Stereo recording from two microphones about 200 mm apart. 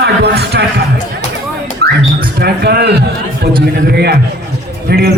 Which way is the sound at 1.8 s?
55° right (ahead or behind).